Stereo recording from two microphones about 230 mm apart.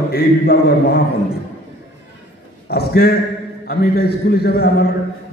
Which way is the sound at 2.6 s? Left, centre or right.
Left.